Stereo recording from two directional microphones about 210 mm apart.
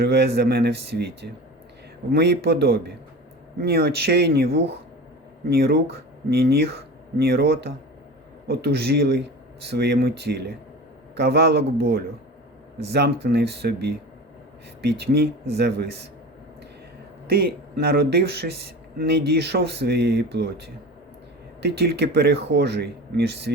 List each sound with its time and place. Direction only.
0.0 s speech: 50° right (ahead or behind)
17.2 s speech: 50° right (ahead or behind)